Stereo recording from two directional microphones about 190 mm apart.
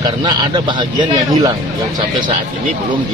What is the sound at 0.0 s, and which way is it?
Speech, 25° right (ahead or behind).